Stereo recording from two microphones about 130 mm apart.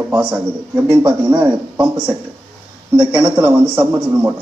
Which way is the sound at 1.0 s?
35° right (ahead or behind).